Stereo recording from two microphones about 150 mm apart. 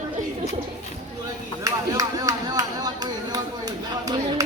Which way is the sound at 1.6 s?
25° right (ahead or behind).